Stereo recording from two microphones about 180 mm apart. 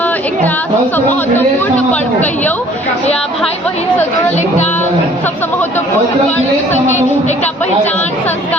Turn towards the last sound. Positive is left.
turn(degrees=40)  # may be behind; listen again after turning